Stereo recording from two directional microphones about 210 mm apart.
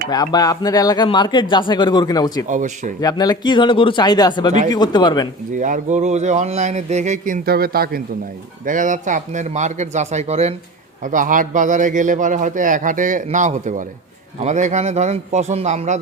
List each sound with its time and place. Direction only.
0.1 s speech: 20° left (ahead or behind)
2.5 s a man's voice: 35° right (ahead or behind)
3.0 s speech: 20° left (ahead or behind)
5.5 s a man's voice: 40° right (ahead or behind)
7.4 s a man's voice: 45° right (ahead or behind)